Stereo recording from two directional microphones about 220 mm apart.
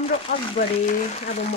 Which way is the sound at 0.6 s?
35° left (ahead or behind).